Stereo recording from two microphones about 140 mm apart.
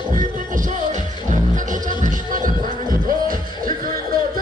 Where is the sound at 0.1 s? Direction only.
70° right (ahead or behind).